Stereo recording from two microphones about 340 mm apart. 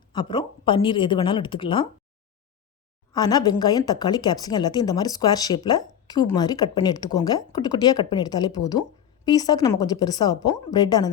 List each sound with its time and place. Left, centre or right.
0.1 s speech: centre
3.1 s speech: centre